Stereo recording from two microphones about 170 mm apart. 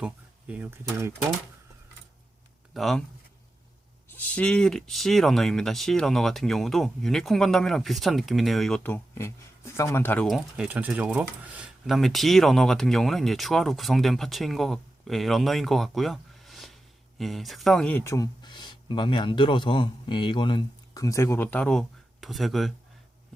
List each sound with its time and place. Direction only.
0.0 s speech: 10° right (ahead or behind)
2.7 s speech: centre (ahead or behind)
4.2 s speech: 5° left (ahead or behind)
10.2 s speech: centre (ahead or behind)